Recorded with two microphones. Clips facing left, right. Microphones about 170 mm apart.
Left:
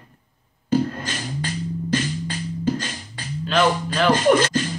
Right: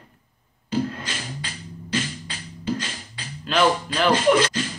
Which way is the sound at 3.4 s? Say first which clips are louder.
Left 1 dB; centre (ahead or behind).